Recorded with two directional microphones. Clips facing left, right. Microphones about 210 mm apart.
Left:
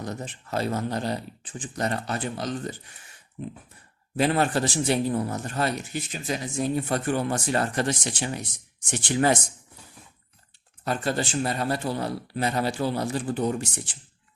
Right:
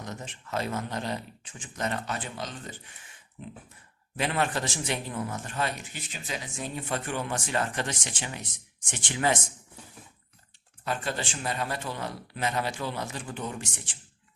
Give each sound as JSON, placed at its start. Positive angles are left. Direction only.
{"t": 0.0, "sound": "a man's voice", "side_deg": 35}
{"t": 4.2, "sound": "a man's voice", "side_deg": 35}
{"t": 10.8, "sound": "a man's voice", "side_deg": 40}